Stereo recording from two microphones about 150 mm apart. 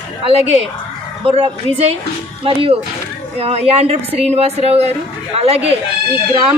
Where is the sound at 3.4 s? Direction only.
45° right (ahead or behind).